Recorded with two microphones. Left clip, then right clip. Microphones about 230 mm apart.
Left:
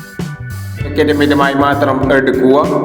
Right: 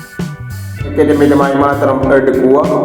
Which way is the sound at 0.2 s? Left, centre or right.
Centre.